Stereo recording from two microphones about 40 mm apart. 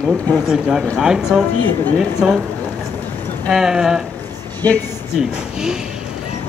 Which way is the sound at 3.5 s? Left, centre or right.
Centre.